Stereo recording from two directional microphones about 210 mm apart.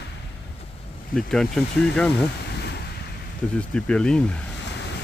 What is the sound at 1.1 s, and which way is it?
Speech, centre (ahead or behind).